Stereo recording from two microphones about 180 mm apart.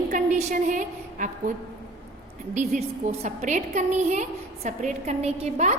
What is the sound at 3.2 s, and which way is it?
A woman's voice, 40° right (ahead or behind).